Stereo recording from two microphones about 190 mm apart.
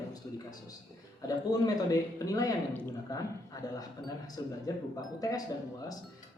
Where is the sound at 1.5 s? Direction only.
20° left (ahead or behind).